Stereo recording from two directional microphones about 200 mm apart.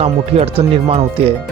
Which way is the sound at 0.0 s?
30° right (ahead or behind).